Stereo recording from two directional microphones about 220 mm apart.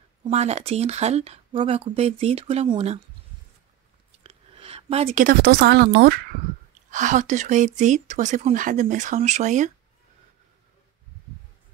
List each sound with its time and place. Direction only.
0.2 s speech: 30° right (ahead or behind)
4.2 s a woman's voice: 25° right (ahead or behind); by 6.3 s 45° right (ahead or behind)
6.9 s speech: 35° right (ahead or behind)